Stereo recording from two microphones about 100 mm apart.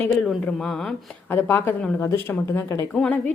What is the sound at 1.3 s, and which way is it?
A woman's voice, 20° left (ahead or behind).